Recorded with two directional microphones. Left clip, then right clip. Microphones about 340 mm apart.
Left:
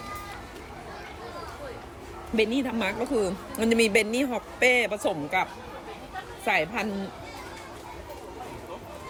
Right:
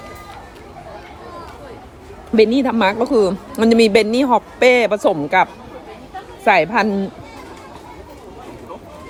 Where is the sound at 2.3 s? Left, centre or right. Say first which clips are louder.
Right 12 dB; centre.